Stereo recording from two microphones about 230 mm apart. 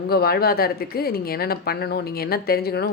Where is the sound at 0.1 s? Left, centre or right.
Left.